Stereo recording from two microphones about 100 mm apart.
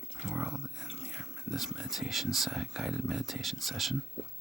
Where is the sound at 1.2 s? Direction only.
5° right (ahead or behind).